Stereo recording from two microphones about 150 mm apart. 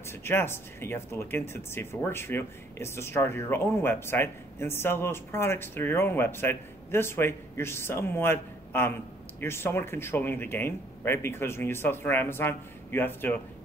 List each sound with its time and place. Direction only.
0.0 s speech: 15° left (ahead or behind)